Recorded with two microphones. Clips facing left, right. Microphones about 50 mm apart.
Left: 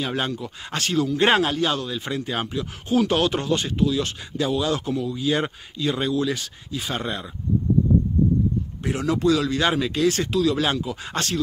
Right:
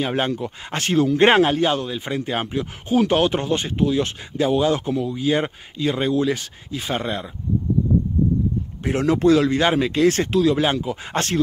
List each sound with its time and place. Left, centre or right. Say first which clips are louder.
0.0 s speech: right 4 dB; right
8.8 s speech: right 4 dB; right